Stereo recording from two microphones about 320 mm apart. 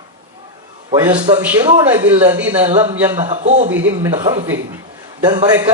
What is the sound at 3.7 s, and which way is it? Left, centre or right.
Speech, right.